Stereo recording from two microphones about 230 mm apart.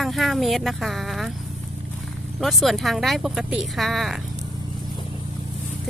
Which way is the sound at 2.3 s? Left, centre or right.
Centre.